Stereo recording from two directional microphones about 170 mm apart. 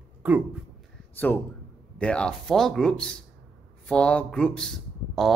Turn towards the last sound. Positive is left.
turn(degrees=0)  # may be behind; listen again after turning